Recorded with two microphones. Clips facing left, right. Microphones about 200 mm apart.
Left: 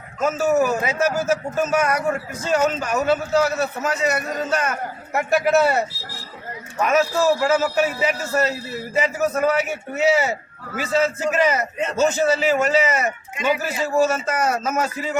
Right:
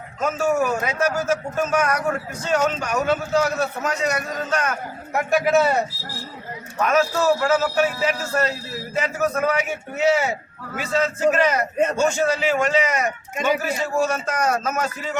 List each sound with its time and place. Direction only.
0.2 s a man's voice: 5° left (ahead or behind)